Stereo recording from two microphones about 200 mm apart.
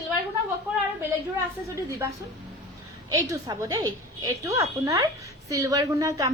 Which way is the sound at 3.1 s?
15° right (ahead or behind).